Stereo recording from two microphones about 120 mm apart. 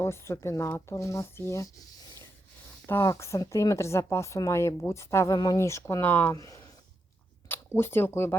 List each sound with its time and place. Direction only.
0.0 s a woman's voice: 20° left (ahead or behind)
2.8 s a woman's voice: 25° left (ahead or behind)
6.3 s a woman's voice: 30° left (ahead or behind)
7.8 s speech: 20° left (ahead or behind)